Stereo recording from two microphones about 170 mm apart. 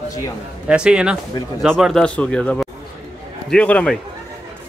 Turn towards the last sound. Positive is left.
turn(degrees=5)  # may be behind; listen again after turning